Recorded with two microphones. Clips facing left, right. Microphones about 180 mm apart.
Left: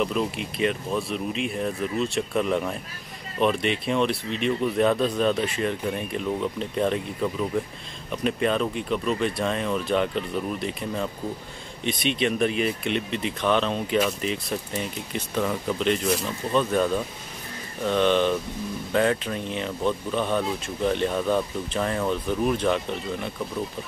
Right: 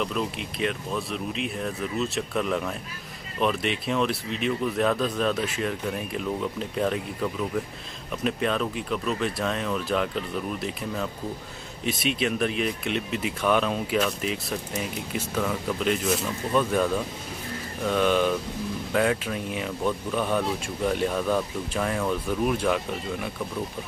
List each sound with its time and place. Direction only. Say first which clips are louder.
0.0 s speech: left 3 dB; 5° left (ahead or behind)
17.8 s speech: left 1 dB; 5° right (ahead or behind)